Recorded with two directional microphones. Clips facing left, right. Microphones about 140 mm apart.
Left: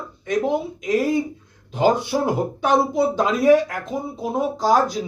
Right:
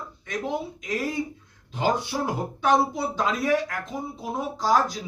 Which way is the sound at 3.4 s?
20° left (ahead or behind).